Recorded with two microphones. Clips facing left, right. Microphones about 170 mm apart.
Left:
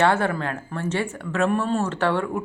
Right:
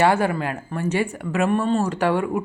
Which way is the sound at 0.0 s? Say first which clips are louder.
Right 2 dB; 15° right (ahead or behind).